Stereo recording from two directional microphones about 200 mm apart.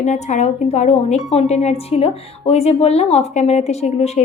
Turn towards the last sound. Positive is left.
turn(degrees=35)  # may be behind; listen again after turning